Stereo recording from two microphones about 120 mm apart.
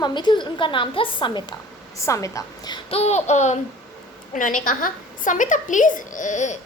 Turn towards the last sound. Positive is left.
turn(degrees=85)